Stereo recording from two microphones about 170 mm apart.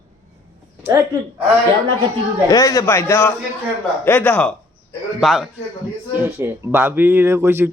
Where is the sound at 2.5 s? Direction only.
20° left (ahead or behind); by 5.5 s centre (ahead or behind).